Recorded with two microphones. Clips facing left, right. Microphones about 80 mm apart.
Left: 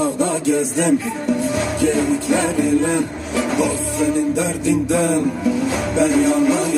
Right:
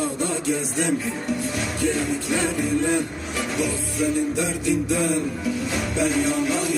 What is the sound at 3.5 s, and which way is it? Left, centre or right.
Music, left.